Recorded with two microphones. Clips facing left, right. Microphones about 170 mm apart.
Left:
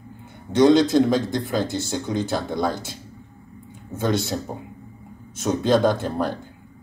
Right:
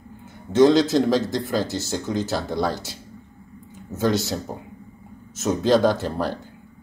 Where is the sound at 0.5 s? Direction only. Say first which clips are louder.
Right 2 dB; centre (ahead or behind).